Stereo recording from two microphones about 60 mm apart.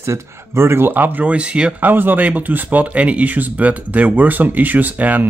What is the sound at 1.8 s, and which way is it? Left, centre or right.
Speech, right.